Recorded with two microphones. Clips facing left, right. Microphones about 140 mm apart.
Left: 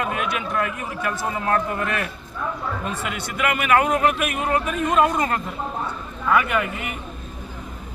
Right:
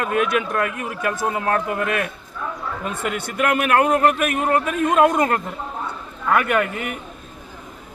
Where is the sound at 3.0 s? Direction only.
50° right (ahead or behind).